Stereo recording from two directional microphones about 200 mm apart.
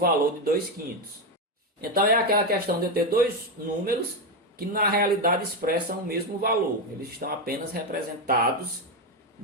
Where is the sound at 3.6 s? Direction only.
45° right (ahead or behind).